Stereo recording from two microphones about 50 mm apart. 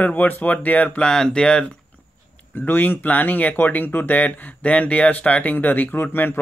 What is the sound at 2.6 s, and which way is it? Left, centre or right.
Speech, left.